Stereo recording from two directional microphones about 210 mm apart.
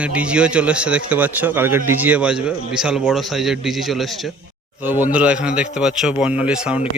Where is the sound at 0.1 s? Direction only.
5° right (ahead or behind).